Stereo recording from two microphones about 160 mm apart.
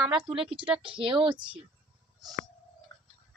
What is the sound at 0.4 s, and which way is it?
Speech, 5° right (ahead or behind).